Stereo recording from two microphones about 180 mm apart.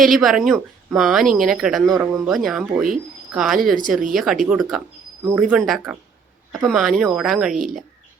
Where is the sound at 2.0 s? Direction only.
10° right (ahead or behind).